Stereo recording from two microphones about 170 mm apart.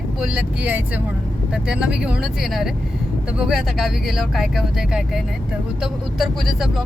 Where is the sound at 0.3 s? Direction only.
10° right (ahead or behind).